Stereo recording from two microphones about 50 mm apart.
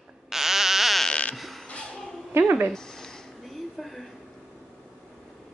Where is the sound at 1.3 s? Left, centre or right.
Centre.